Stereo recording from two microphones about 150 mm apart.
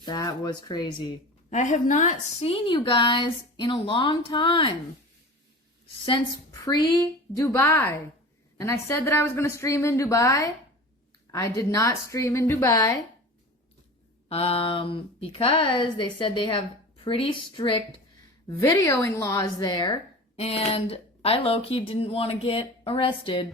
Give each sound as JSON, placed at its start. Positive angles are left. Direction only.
{"t": 0.0, "sound": "a woman's voice", "side_deg": 25}
{"t": 1.5, "sound": "a woman's voice", "side_deg": 55}
{"t": 2.4, "sound": "speech", "side_deg": 35}
{"t": 6.5, "sound": "a woman's voice", "side_deg": 25}
{"t": 14.3, "sound": "speech", "side_deg": 40}
{"t": 18.4, "sound": "a woman's voice", "side_deg": 20}
{"t": 20.3, "sound": "speech", "side_deg": 40}